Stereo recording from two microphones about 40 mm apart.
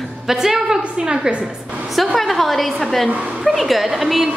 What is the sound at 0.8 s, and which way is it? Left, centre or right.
Speech, right.